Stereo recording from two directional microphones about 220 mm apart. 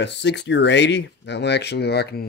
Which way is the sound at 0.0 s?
50° left (ahead or behind).